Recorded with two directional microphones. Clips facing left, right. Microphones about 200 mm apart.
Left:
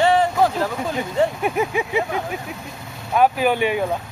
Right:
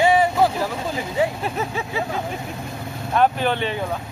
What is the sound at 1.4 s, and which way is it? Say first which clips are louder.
Speech: left 5 dB; 15° left (ahead or behind).